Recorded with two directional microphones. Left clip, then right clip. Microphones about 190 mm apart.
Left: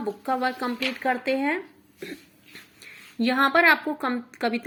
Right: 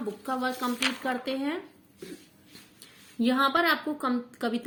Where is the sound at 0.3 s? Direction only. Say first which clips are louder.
Left 4 dB; 20° left (ahead or behind).